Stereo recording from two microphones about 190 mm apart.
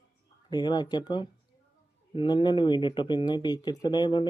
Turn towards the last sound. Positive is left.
turn(degrees=25)  # may be behind; listen again after turning